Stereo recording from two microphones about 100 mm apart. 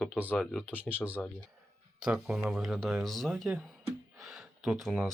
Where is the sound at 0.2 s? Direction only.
15° right (ahead or behind).